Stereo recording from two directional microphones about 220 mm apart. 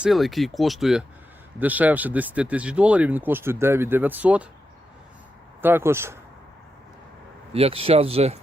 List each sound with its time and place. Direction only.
0.0 s speech: centre (ahead or behind)
5.6 s speech: 10° right (ahead or behind)
7.5 s speech: 25° right (ahead or behind)